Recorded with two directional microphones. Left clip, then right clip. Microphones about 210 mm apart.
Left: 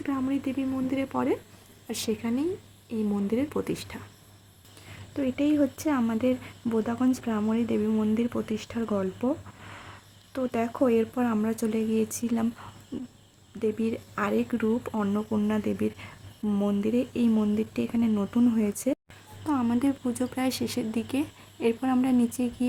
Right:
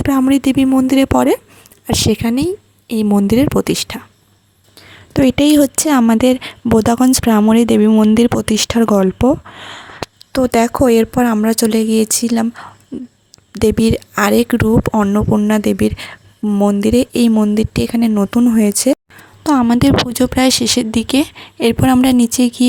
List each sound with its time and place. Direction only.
0.0 s speech: 50° right (ahead or behind)
5.1 s speech: 55° right (ahead or behind)